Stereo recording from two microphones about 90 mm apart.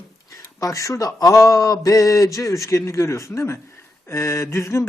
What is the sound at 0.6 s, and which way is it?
Speech, 35° left (ahead or behind).